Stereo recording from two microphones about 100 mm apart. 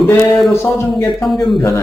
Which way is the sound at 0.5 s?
25° left (ahead or behind).